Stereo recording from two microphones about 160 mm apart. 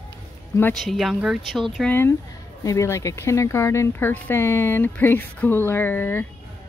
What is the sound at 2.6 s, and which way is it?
Speech, 20° left (ahead or behind).